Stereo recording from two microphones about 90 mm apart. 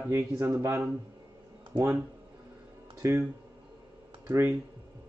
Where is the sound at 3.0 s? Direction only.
35° right (ahead or behind).